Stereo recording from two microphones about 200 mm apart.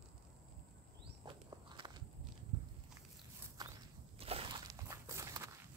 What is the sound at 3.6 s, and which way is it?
Walk, 20° right (ahead or behind).